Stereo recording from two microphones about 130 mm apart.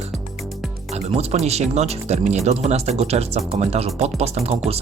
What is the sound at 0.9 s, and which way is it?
Speech, 55° right (ahead or behind).